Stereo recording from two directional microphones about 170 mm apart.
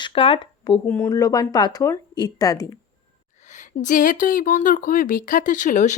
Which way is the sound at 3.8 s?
50° left (ahead or behind).